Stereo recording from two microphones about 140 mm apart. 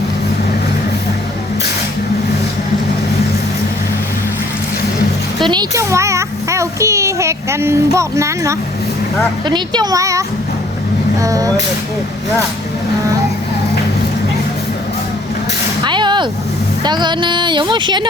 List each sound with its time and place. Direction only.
5.5 s speech: 30° right (ahead or behind)
5.9 s a child's voice: 20° right (ahead or behind)
9.5 s a child's voice: 30° right (ahead or behind)
15.8 s vehicle: 35° right (ahead or behind)
16.8 s speech: 30° right (ahead or behind)